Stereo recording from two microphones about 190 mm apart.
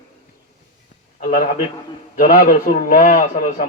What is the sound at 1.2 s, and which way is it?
A man's voice, 45° left (ahead or behind).